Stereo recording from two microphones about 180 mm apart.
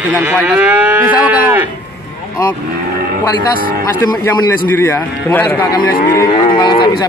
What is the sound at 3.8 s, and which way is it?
A man's voice, 15° left (ahead or behind).